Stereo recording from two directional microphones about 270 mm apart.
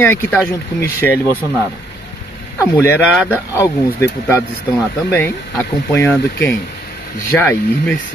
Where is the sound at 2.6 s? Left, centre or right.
Centre.